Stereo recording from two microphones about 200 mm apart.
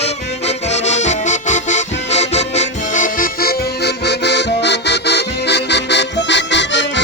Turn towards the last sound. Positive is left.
turn(degrees=60)  # may be behind; listen again after turning